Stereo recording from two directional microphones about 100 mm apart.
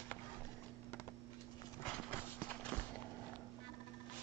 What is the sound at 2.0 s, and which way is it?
Clip-clop, 15° left (ahead or behind).